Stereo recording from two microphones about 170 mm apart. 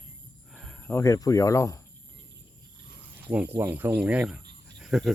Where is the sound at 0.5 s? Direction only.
Centre (ahead or behind).